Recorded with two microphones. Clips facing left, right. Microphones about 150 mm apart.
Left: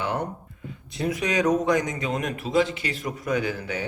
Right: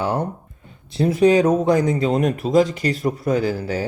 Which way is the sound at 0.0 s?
30° right (ahead or behind).